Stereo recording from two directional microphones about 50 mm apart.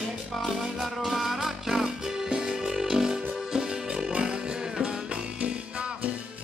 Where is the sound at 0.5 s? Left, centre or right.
Centre.